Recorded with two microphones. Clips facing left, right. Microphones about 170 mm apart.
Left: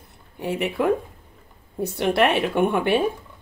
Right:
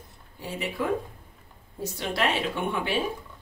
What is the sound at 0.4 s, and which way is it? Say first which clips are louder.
A woman's voice: left 7 dB; 65° left (ahead or behind).